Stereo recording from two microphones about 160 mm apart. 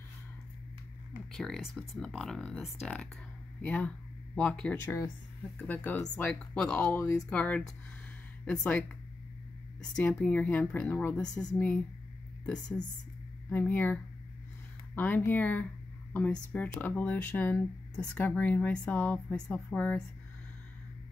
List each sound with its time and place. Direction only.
1.3 s speech: 5° left (ahead or behind)
7.0 s speech: 15° left (ahead or behind)
13.5 s speech: 10° left (ahead or behind)